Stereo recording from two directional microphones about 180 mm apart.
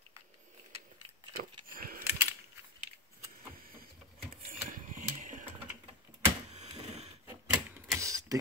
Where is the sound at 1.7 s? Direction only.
55° right (ahead or behind).